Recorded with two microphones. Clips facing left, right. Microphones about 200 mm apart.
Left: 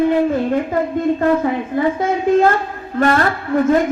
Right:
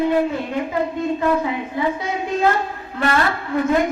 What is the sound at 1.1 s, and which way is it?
A woman's voice, 50° left (ahead or behind).